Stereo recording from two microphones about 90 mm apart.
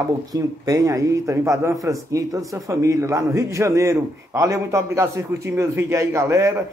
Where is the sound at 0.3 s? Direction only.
40° right (ahead or behind).